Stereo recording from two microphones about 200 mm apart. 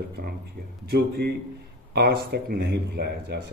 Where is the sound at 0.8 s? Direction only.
55° right (ahead or behind).